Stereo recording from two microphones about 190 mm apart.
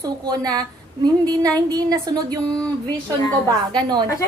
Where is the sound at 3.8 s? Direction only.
20° right (ahead or behind).